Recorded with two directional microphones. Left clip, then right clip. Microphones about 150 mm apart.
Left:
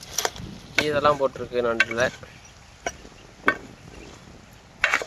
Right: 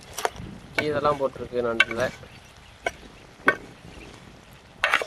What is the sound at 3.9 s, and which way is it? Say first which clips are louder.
Boat: left 1 dB; centre (ahead or behind).